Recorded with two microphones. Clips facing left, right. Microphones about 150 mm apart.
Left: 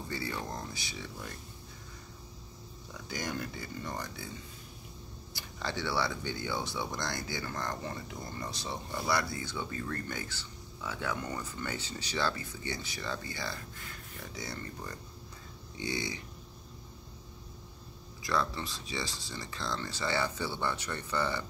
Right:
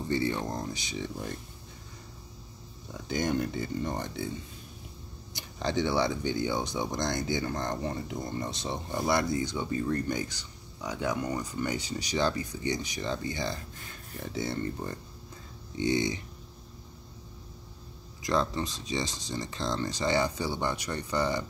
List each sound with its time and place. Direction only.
0.1 s speech: 20° right (ahead or behind)
2.9 s speech: 25° right (ahead or behind)
5.3 s speech: 20° right (ahead or behind)
18.2 s speech: 20° right (ahead or behind)